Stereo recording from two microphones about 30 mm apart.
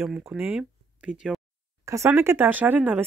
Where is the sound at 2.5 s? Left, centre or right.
Right.